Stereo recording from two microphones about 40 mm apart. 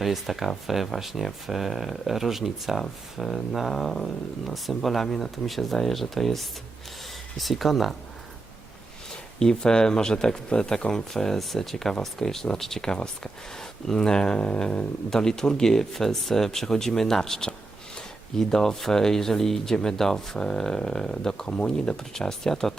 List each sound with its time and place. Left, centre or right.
0.0 s speech: centre
9.4 s speech: centre
15.1 s speech: centre
22.1 s speech: centre